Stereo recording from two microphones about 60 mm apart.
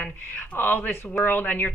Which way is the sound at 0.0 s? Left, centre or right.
Left.